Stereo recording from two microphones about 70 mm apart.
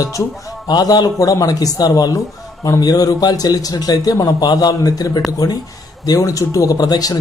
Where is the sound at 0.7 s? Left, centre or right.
Left.